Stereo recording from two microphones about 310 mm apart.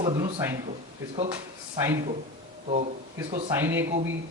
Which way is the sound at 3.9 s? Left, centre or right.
Right.